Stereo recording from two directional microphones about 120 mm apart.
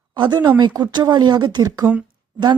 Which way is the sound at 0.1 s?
35° right (ahead or behind).